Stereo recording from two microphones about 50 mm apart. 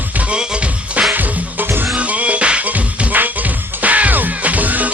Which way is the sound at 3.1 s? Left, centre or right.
Right.